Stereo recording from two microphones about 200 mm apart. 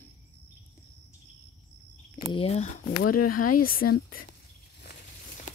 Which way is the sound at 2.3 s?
30° left (ahead or behind).